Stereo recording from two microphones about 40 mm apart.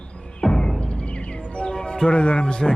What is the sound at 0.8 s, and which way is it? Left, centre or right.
Music, left.